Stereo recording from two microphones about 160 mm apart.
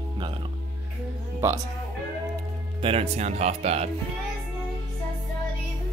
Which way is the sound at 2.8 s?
40° right (ahead or behind).